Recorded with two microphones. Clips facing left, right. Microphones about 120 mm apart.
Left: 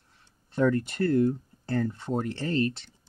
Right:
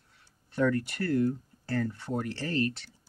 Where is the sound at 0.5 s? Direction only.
25° left (ahead or behind).